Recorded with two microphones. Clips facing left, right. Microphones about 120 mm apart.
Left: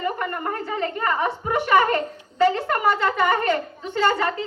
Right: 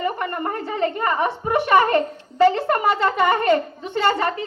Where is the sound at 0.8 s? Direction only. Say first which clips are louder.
Right 3 dB; 30° right (ahead or behind).